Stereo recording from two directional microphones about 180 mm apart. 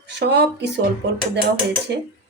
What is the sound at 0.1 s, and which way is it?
Speech, 70° right (ahead or behind).